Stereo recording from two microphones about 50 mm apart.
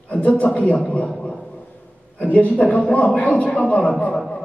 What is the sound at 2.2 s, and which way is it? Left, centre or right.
A man's voice, left.